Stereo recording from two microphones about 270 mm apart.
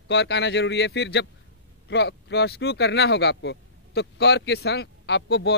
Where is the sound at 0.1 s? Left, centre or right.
Left.